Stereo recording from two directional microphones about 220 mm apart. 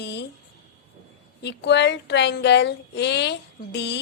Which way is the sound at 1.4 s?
50° left (ahead or behind).